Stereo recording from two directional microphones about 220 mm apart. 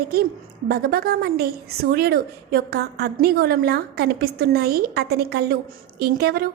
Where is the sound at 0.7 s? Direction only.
45° right (ahead or behind).